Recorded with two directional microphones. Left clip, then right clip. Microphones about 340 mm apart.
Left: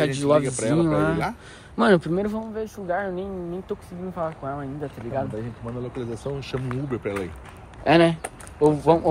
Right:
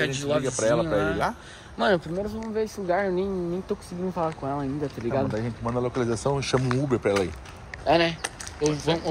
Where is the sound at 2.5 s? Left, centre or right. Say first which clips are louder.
Right 6 dB; centre.